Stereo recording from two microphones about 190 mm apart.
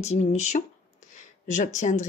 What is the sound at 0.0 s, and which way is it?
Speech, 35° left (ahead or behind).